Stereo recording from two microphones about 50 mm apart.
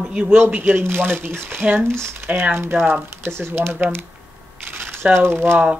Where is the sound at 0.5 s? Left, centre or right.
Right.